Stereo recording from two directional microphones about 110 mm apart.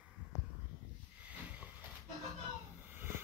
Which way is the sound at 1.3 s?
15° right (ahead or behind).